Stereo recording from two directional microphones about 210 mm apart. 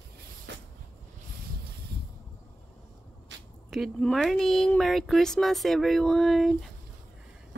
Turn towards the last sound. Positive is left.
turn(degrees=0)  # may be behind; listen again after turning